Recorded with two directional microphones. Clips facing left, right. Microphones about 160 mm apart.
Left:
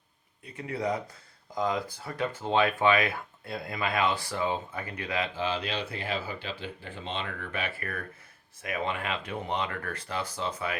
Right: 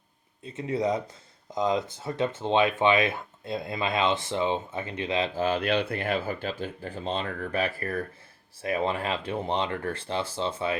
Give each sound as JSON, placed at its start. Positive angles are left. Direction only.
{"t": 0.4, "sound": "speech", "side_deg": -25}
{"t": 5.3, "sound": "speech", "side_deg": -50}